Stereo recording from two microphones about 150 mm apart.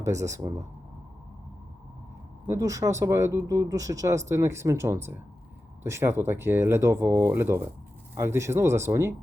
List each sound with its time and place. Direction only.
0.0 s speech: 20° right (ahead or behind)
2.5 s speech: 20° right (ahead or behind)